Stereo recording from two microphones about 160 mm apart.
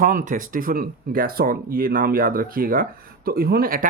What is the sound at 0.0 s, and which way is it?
Speech, 60° right (ahead or behind).